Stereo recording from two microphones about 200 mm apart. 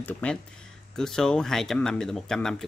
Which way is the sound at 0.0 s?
5° left (ahead or behind).